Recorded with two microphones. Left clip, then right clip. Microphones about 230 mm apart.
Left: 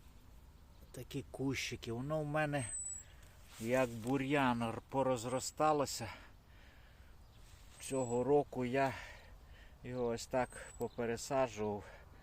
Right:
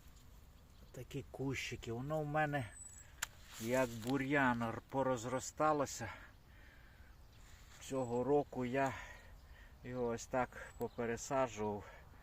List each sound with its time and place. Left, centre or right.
0.9 s speech: centre
7.8 s a man's voice: centre